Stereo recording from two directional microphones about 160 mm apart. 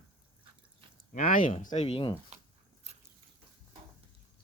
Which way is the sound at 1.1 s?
50° left (ahead or behind).